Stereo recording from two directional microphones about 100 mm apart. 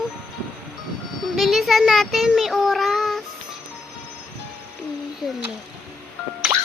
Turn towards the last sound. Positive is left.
turn(degrees=-15)  # may be behind; listen again after turning